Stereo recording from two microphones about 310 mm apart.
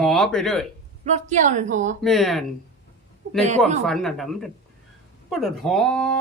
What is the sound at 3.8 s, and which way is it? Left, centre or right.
Speech, centre.